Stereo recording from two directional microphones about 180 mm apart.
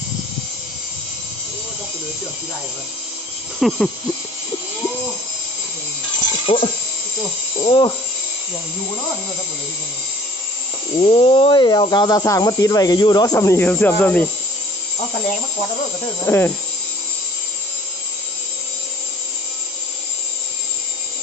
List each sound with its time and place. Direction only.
3.6 s a sound: centre (ahead or behind)
6.4 s speech: 30° left (ahead or behind)
10.9 s speech: 30° left (ahead or behind); by 14.3 s 10° left (ahead or behind)
16.2 s speech: 15° left (ahead or behind)